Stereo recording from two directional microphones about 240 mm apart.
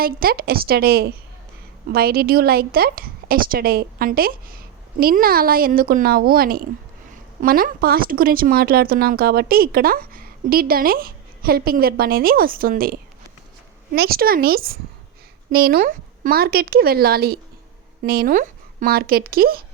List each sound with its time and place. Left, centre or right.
0.0 s speech: right